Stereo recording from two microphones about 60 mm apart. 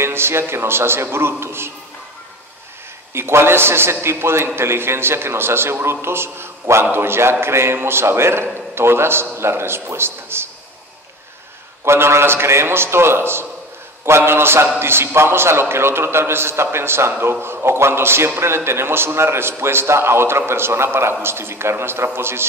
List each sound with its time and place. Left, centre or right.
0.0 s a man's voice: right
3.1 s a man's voice: right
11.8 s a man's voice: right